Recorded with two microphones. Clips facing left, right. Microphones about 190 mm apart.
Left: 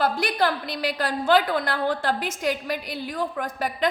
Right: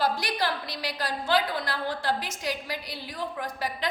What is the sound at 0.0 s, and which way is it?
A woman's voice, 55° left (ahead or behind).